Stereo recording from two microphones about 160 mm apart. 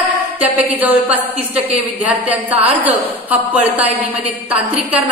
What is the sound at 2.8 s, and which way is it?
A woman's voice, 10° right (ahead or behind).